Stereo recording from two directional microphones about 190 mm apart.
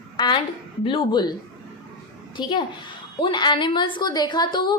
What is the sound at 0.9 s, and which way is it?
Speech, 25° left (ahead or behind).